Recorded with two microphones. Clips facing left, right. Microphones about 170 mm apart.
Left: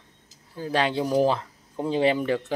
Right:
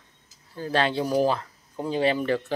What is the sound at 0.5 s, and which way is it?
Speech, 10° left (ahead or behind).